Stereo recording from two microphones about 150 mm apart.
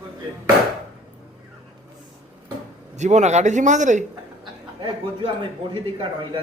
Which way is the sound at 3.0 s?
50° right (ahead or behind).